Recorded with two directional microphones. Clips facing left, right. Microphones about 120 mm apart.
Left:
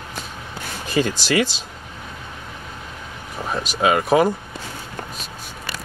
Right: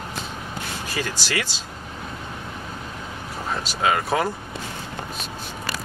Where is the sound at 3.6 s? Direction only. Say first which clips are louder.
Left 4 dB; 20° left (ahead or behind).